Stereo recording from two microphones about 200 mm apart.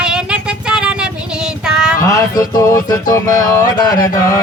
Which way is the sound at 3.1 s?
15° left (ahead or behind).